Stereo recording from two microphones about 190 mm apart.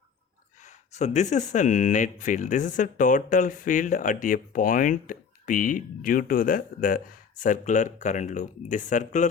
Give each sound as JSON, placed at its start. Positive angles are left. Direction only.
{"t": 0.6, "sound": "speech", "side_deg": 35}